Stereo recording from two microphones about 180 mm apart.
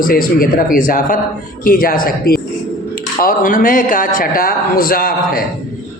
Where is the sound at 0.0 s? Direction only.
50° left (ahead or behind).